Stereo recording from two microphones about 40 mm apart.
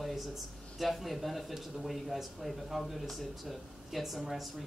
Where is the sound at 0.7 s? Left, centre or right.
Centre.